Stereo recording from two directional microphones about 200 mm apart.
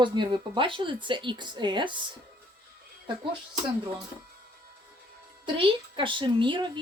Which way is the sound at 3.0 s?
25° right (ahead or behind).